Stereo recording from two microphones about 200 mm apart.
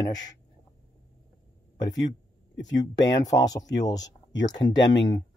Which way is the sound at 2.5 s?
65° left (ahead or behind).